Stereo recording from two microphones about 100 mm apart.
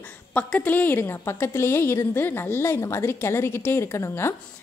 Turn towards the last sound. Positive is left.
turn(degrees=30)  # may be behind; listen again after turning